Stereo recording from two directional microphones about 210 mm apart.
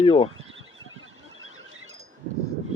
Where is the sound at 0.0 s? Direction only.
25° left (ahead or behind).